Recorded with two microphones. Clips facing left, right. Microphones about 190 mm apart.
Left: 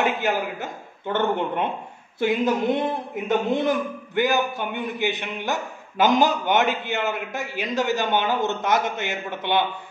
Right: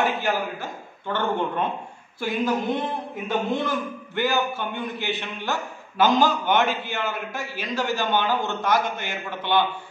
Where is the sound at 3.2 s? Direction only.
20° left (ahead or behind).